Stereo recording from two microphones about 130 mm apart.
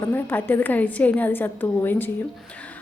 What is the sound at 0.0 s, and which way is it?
A woman's voice, 15° left (ahead or behind).